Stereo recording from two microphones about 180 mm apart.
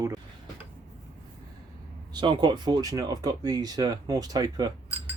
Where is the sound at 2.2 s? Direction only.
25° right (ahead or behind).